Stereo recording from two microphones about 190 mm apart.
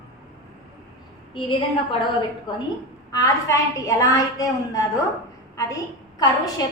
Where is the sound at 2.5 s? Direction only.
20° left (ahead or behind).